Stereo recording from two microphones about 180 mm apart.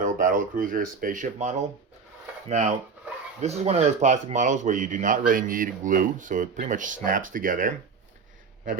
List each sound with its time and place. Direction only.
0.0 s a man's voice: 50° right (ahead or behind)